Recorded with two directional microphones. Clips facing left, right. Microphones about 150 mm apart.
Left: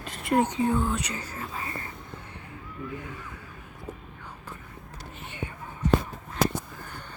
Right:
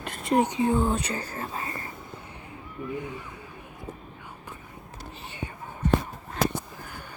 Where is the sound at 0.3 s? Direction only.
15° right (ahead or behind); by 1.7 s 35° right (ahead or behind).